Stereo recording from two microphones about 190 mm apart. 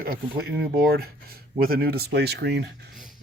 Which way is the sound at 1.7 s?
55° right (ahead or behind).